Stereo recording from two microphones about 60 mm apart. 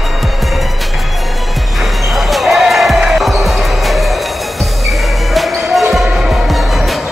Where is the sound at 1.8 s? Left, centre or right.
Centre.